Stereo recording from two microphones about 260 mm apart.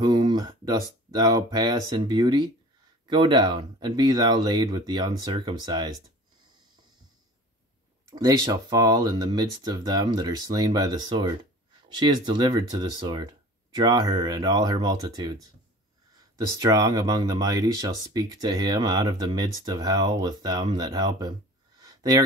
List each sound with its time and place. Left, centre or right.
0.0 s speech: centre
8.1 s speech: centre
21.7 s a sound: centre